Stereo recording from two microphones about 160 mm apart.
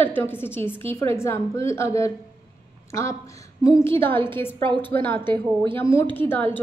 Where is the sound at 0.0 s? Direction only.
15° left (ahead or behind).